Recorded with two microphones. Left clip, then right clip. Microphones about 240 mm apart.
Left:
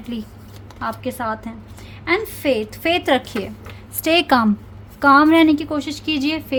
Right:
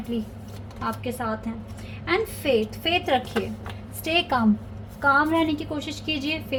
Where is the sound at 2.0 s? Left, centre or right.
Left.